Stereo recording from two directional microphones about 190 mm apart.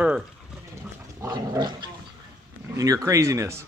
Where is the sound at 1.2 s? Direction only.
20° right (ahead or behind).